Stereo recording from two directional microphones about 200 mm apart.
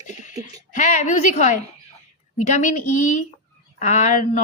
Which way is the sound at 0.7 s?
40° left (ahead or behind).